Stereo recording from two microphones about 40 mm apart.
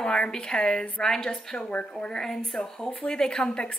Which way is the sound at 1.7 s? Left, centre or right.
Left.